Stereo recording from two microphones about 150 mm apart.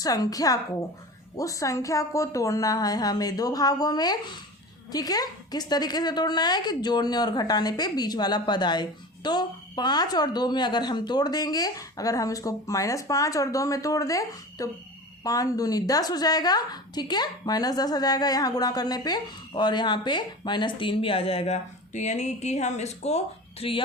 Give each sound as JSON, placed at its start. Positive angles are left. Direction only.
{"t": 0.0, "sound": "a woman's voice", "side_deg": 25}